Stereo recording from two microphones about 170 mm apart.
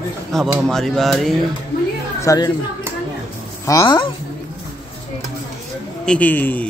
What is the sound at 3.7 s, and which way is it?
Speech, 25° left (ahead or behind).